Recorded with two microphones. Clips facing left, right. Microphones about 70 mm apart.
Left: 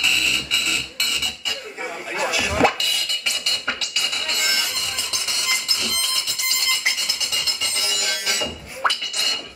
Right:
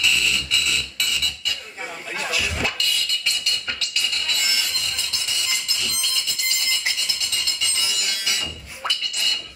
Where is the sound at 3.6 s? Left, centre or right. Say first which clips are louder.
Left 2 dB; centre.